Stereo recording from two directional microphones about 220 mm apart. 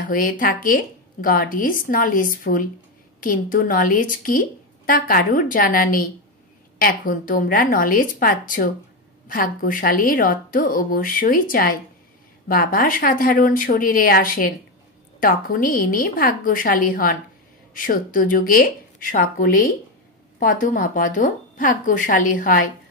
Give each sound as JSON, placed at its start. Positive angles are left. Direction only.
{"t": 0.0, "sound": "a woman's voice", "side_deg": 40}